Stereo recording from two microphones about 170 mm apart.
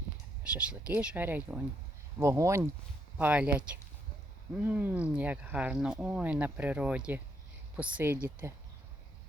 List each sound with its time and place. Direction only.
0.4 s speech: 5° right (ahead or behind)